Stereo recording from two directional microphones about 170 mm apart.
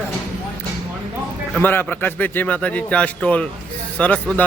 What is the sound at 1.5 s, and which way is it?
A man's voice, 10° left (ahead or behind).